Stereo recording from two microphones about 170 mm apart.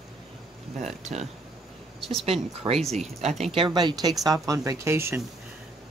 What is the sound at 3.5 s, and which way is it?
Speech, 30° right (ahead or behind).